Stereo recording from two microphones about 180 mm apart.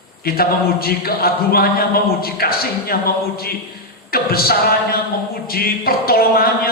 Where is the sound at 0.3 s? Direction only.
55° left (ahead or behind).